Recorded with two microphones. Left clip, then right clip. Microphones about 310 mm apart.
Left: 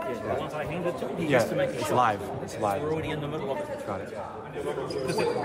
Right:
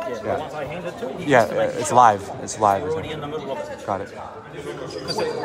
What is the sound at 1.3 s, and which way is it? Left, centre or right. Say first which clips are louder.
Speech: right 8 dB; right.